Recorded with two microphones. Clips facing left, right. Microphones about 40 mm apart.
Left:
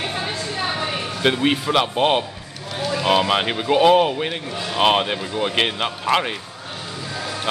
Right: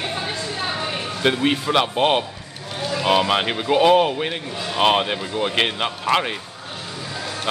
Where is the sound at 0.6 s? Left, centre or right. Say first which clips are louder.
Left 2 dB; centre.